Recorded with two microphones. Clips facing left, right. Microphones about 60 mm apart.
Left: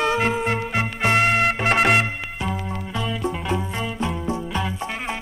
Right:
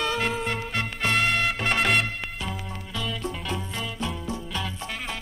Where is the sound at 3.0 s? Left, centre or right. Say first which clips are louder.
Left 5 dB; left.